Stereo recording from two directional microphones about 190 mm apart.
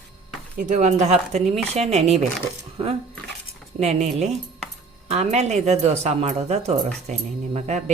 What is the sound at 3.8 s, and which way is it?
A woman's voice, 35° right (ahead or behind).